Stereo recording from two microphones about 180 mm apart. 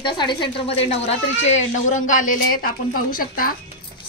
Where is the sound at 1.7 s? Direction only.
40° left (ahead or behind).